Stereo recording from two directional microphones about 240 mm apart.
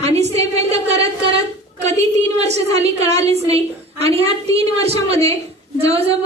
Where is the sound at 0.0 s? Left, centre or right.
Right.